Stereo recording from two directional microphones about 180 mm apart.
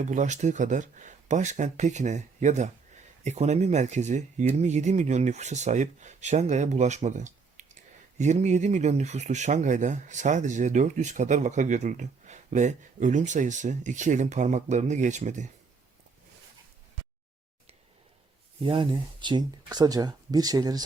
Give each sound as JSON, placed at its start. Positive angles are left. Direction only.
{"t": 0.0, "sound": "speech", "side_deg": -40}
{"t": 18.6, "sound": "speech", "side_deg": -30}